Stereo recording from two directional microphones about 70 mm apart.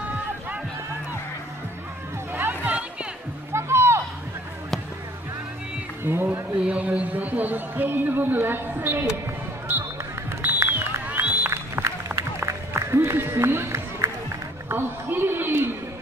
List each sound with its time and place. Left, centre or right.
2.6 s music: right
3.5 s music: right
6.2 s a man's voice: right
10.4 s music: right
11.8 s run: right
12.2 s music: right
14.7 s a sound: right